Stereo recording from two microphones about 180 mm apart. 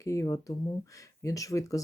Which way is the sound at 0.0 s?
15° left (ahead or behind).